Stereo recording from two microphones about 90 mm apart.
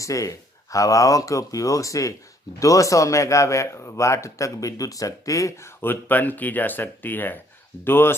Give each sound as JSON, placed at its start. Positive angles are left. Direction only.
{"t": 0.0, "sound": "speech", "side_deg": 35}